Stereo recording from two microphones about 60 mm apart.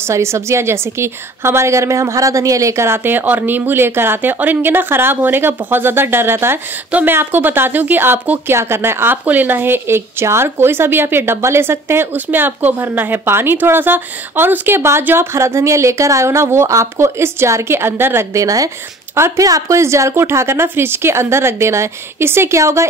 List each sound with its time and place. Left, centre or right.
0.0 s a woman's voice: right
18.3 s speech: right
19.8 s a woman's voice: right